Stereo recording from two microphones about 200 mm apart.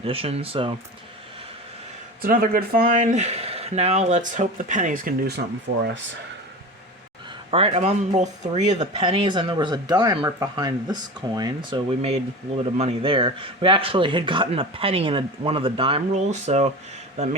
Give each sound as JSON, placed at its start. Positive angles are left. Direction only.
{"t": 0.0, "sound": "speech", "side_deg": -30}
{"t": 2.2, "sound": "speech", "side_deg": -45}
{"t": 7.5, "sound": "speech", "side_deg": -30}